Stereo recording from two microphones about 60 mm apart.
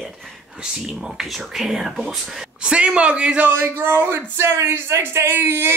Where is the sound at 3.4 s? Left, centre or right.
Right.